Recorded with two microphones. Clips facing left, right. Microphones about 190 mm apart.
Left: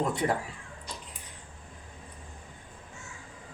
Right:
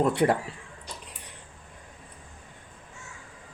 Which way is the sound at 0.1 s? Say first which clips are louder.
Right 5 dB; 70° right (ahead or behind).